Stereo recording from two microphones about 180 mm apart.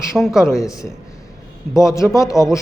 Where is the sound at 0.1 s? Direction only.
Centre (ahead or behind).